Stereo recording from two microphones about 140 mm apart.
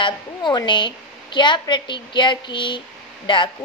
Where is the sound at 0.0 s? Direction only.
35° left (ahead or behind).